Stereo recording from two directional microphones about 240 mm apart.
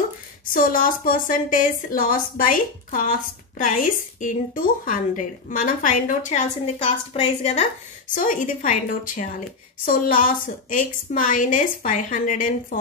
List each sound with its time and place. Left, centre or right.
0.5 s a woman's voice: left